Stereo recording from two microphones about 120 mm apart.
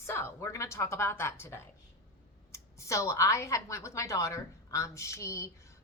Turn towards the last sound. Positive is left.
turn(degrees=25)  # may be behind; listen again after turning